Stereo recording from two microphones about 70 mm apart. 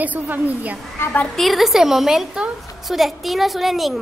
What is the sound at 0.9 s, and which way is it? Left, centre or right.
Speech, left.